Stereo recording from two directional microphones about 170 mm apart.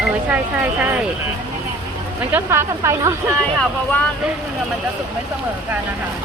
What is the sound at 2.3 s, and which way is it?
Speech, 15° right (ahead or behind).